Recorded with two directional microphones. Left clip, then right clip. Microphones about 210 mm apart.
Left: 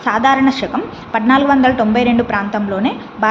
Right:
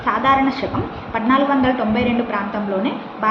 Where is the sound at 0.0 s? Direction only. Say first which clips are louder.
Left 3 dB; 55° left (ahead or behind).